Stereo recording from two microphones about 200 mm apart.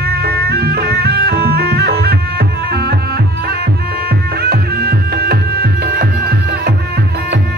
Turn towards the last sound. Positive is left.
turn(degrees=-50)  # may be behind; listen again after turning